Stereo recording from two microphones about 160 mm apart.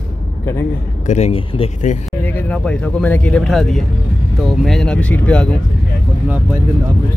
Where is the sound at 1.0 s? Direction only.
45° left (ahead or behind).